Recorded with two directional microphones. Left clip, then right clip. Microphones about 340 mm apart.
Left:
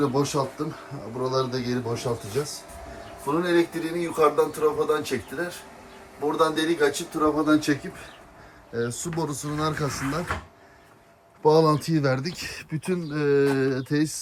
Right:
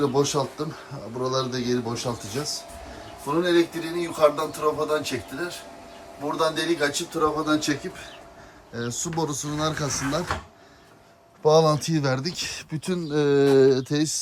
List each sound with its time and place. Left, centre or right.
0.0 s a man's voice: centre
11.4 s a man's voice: centre